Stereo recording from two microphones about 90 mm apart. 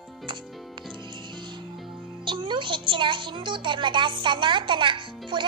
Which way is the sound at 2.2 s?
65° right (ahead or behind).